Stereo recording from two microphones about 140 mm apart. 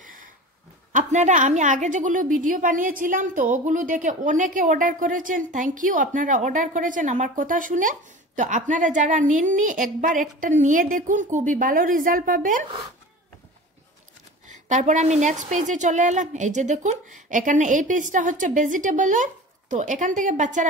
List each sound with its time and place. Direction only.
0.0 s a sound: 80° right
0.9 s speech: 60° right (ahead or behind)
14.7 s a woman's voice: 60° right (ahead or behind)